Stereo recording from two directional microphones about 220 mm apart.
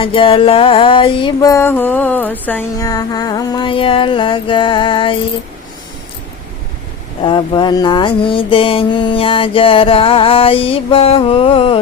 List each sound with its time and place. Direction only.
0.0 s music: 25° left (ahead or behind)
7.3 s music: 20° left (ahead or behind)